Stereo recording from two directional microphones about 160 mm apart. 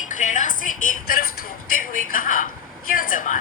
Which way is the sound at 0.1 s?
50° left (ahead or behind).